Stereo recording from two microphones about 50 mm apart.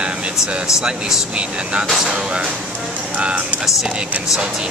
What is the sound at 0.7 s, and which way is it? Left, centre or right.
Speech, centre.